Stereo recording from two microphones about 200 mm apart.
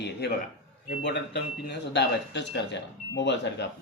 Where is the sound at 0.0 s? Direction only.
55° left (ahead or behind).